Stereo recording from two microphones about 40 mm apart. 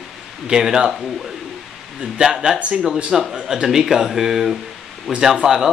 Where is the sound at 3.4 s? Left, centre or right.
Centre.